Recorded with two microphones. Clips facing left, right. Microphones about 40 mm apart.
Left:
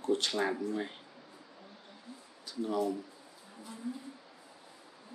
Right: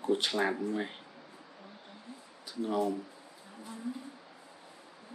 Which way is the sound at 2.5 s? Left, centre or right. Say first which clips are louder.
Right 1 dB; centre.